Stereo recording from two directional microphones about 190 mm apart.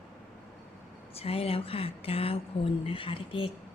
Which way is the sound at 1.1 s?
30° left (ahead or behind).